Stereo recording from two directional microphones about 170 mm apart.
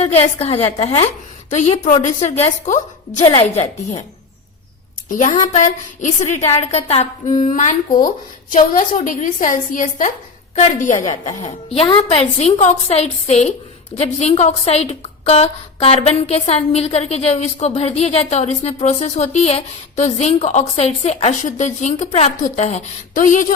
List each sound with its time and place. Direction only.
0.0 s a woman's voice: 35° left (ahead or behind)
5.0 s speech: 50° left (ahead or behind)
11.4 s a woman's voice: 30° left (ahead or behind); by 23.6 s 50° left (ahead or behind)